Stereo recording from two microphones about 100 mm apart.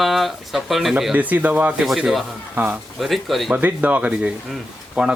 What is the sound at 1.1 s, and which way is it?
Speech, 15° right (ahead or behind).